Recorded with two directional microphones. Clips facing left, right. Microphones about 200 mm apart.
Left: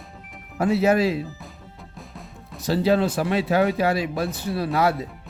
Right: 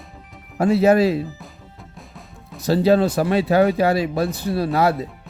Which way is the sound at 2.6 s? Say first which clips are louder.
Right 4 dB; 40° right (ahead or behind).